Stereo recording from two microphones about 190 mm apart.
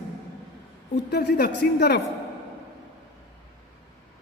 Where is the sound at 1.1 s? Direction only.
60° left (ahead or behind).